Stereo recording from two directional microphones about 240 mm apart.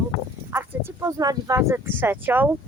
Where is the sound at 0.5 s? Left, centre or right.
Centre.